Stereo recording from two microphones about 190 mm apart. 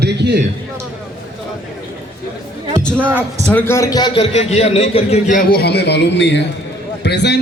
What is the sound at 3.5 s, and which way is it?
A man's voice, 15° left (ahead or behind).